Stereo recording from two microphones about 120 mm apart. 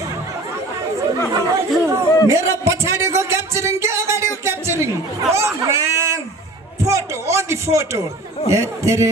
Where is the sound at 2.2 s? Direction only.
25° right (ahead or behind).